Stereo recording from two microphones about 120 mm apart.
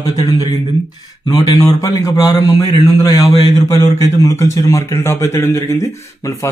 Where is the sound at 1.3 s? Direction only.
30° left (ahead or behind).